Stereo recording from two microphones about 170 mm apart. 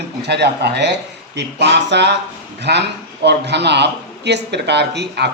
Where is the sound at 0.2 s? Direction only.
80° right.